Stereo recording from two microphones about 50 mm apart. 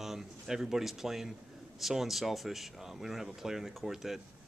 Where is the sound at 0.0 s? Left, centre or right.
Centre.